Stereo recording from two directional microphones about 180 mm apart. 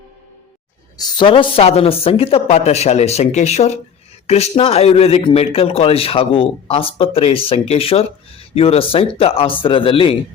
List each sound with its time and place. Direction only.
0.9 s speech: 25° left (ahead or behind)